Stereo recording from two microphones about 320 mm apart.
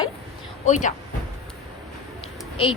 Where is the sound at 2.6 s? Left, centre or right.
Centre.